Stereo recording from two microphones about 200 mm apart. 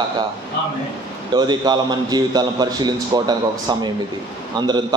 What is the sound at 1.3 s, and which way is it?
A man's voice, 20° right (ahead or behind).